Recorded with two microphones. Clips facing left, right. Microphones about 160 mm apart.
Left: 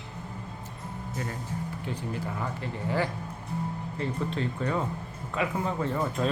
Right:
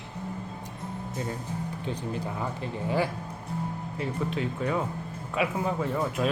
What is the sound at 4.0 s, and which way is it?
Speech, 5° right (ahead or behind).